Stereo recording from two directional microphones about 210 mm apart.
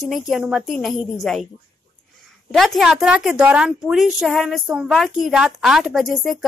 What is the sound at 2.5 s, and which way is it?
A woman's voice, centre (ahead or behind).